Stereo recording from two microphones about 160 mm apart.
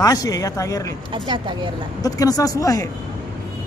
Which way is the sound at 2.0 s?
20° left (ahead or behind).